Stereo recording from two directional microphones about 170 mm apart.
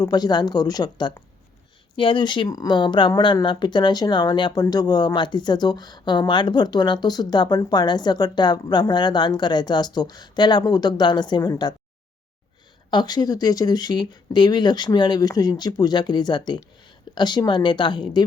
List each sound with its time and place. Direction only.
0.0 s speech: 25° left (ahead or behind)
12.9 s speech: 25° left (ahead or behind)